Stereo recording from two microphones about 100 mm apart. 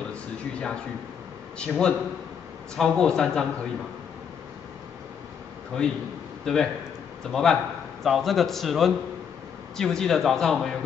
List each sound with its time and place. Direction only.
0.1 s a sound: 10° left (ahead or behind)
1.6 s speech: 5° left (ahead or behind)
5.8 s a man's voice: 10° left (ahead or behind)